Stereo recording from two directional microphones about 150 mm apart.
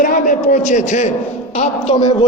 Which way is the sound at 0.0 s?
60° left (ahead or behind).